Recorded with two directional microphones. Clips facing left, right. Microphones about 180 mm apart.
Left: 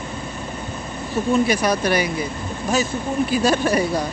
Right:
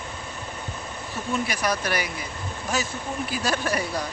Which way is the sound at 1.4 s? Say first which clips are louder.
Left 7 dB; 20° left (ahead or behind).